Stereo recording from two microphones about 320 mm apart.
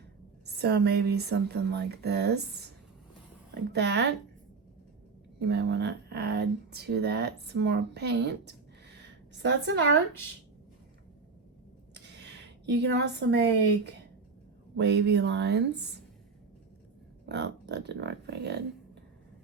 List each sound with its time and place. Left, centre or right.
0.4 s speech: right
3.7 s speech: right
5.4 s speech: right
11.9 s a sound: right
14.8 s speech: right
17.2 s speech: right